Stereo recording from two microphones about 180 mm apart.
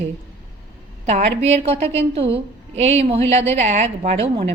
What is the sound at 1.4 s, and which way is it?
A woman's voice, 35° right (ahead or behind).